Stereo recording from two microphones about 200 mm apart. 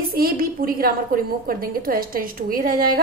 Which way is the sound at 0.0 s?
45° right (ahead or behind).